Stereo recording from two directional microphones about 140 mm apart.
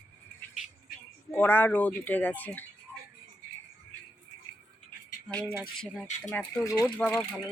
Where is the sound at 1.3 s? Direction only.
15° left (ahead or behind).